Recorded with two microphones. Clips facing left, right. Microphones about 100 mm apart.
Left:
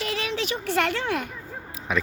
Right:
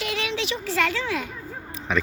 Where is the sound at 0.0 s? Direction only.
35° left (ahead or behind); by 1.3 s 55° left (ahead or behind).